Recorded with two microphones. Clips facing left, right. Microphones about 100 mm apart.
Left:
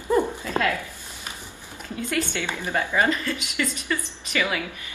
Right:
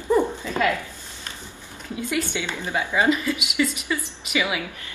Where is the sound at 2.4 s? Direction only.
10° right (ahead or behind).